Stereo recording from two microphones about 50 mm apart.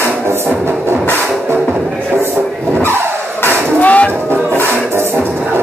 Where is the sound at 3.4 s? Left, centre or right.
Left.